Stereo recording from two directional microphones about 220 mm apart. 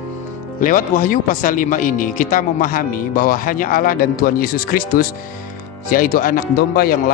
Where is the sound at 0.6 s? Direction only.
35° left (ahead or behind).